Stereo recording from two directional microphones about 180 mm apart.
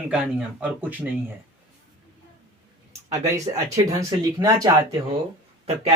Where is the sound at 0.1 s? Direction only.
5° right (ahead or behind).